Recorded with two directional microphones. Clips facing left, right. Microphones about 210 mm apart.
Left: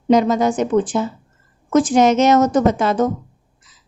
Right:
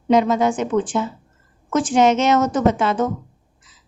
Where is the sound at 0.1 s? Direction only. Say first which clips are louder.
Left 2 dB; 40° left (ahead or behind).